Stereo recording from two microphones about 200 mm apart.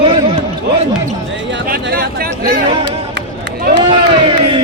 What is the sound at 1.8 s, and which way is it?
Speech, 50° right (ahead or behind).